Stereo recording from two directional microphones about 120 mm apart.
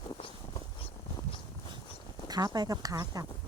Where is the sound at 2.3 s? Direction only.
35° right (ahead or behind).